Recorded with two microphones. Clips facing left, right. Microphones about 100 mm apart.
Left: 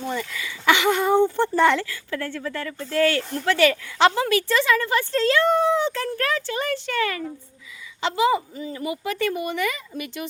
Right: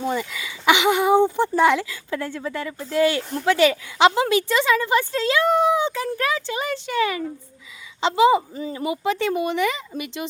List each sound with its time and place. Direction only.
0.0 s speech: 15° right (ahead or behind)